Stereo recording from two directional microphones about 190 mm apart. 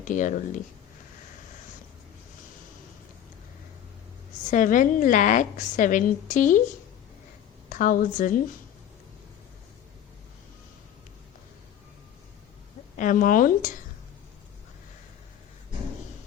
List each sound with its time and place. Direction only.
0.0 s a woman's voice: 40° left (ahead or behind)
4.5 s a woman's voice: 40° left (ahead or behind)
7.7 s speech: 45° left (ahead or behind)
13.0 s speech: 45° left (ahead or behind)